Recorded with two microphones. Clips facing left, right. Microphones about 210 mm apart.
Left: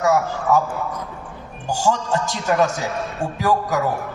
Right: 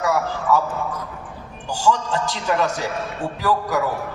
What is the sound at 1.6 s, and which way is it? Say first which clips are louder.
A man's voice: even; 45° left (ahead or behind).